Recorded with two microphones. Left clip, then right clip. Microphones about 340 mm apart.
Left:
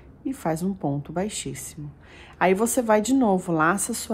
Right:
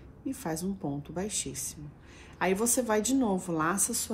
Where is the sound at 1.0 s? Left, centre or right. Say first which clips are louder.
Left 6 dB; left.